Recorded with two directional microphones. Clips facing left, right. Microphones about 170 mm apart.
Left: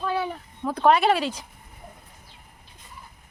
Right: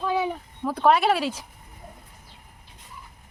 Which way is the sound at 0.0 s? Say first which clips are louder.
Right 2 dB; 10° right (ahead or behind).